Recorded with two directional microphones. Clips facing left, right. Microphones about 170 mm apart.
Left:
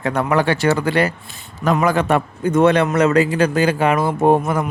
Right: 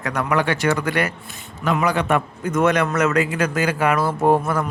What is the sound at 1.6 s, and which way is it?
A man's voice, 45° left (ahead or behind).